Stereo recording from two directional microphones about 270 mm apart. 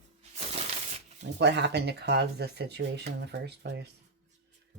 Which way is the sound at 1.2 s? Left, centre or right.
Right.